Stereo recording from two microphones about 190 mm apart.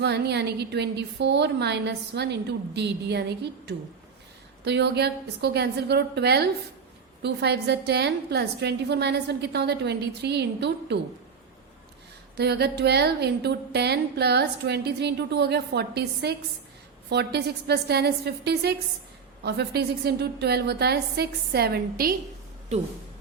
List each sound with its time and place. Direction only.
0.0 s a woman's voice: 60° right (ahead or behind)
12.4 s a woman's voice: 60° right (ahead or behind)